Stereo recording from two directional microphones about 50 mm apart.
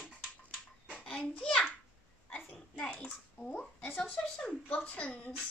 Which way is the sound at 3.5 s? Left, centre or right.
Left.